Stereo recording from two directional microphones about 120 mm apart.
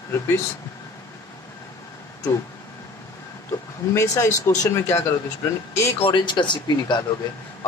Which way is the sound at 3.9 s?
25° left (ahead or behind).